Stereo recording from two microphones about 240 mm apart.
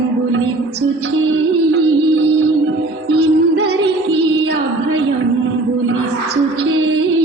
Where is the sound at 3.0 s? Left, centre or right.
Right.